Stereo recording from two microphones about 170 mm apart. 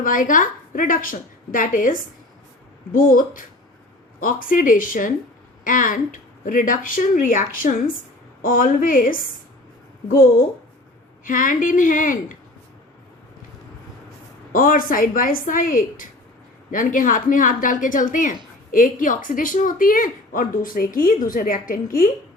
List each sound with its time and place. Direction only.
0.0 s a woman's voice: 50° left (ahead or behind)
11.3 s a woman's voice: 50° left (ahead or behind)
14.5 s a woman's voice: 55° left (ahead or behind)